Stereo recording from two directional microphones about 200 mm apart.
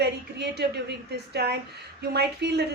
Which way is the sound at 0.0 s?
55° right (ahead or behind).